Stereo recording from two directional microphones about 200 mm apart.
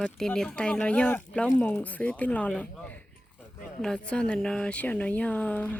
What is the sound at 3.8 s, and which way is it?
A woman's voice, 5° left (ahead or behind).